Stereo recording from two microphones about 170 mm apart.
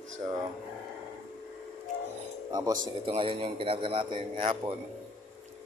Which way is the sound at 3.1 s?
35° right (ahead or behind).